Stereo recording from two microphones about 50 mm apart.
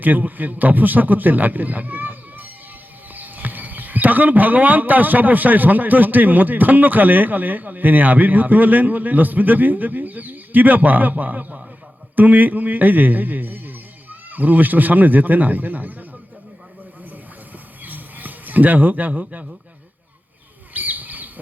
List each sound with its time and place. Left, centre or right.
0.0 s a man's voice: right
17.8 s a sound: right
20.7 s bird: right